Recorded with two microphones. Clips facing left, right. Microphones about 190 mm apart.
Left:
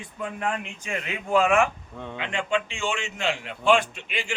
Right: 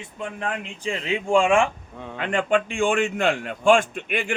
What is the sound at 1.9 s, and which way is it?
Speech, centre (ahead or behind).